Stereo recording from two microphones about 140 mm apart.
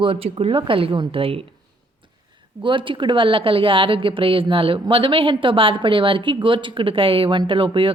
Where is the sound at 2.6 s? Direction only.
35° right (ahead or behind).